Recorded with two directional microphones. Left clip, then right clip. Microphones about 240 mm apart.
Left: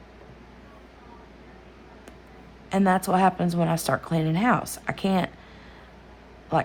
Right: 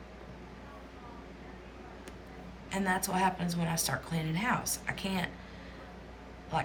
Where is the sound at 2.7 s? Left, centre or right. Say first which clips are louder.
Left 10 dB; left.